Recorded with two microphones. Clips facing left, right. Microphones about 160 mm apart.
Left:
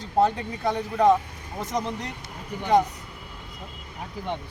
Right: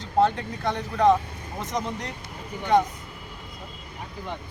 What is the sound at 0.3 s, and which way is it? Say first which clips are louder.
Speech: left 1 dB; 5° left (ahead or behind).